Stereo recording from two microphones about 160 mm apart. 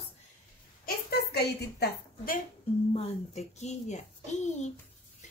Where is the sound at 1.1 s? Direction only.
85° left.